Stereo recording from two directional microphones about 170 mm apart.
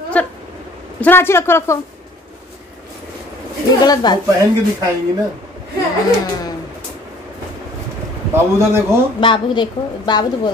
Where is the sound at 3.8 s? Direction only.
25° left (ahead or behind).